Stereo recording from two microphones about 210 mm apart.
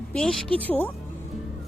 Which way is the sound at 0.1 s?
Centre (ahead or behind).